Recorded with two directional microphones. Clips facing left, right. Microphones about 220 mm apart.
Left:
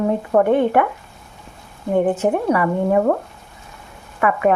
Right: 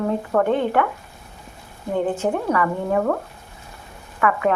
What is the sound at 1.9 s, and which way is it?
Speech, 20° left (ahead or behind).